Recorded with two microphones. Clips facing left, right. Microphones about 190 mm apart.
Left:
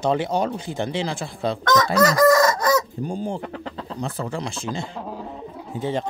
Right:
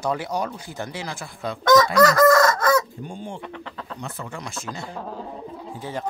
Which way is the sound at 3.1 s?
35° left (ahead or behind).